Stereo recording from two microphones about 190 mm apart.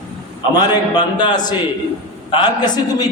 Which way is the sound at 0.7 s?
25° left (ahead or behind).